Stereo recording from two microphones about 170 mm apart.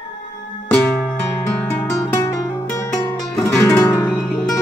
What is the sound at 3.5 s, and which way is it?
Music, 10° left (ahead or behind).